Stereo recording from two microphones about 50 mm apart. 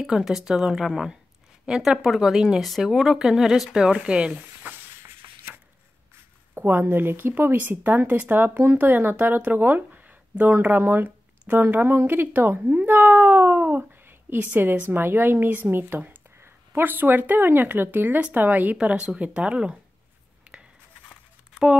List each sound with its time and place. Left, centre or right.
0.0 s speech: centre
4.6 s a sound: right
6.6 s speech: right
15.7 s speech: right
18.8 s speech: right